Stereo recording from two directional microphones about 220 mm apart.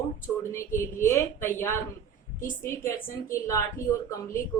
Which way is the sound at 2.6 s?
40° left (ahead or behind).